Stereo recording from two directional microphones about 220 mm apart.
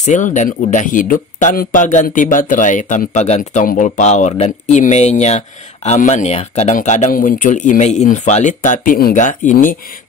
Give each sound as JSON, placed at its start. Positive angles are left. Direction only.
{"t": 0.0, "sound": "a man's voice", "side_deg": 35}